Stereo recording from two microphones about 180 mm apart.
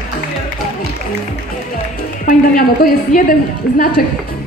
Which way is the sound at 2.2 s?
50° left (ahead or behind).